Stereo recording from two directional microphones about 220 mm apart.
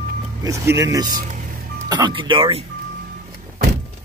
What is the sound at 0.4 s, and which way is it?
Speech, 15° right (ahead or behind).